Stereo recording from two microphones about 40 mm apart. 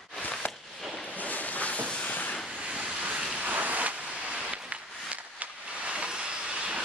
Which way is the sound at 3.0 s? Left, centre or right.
Right.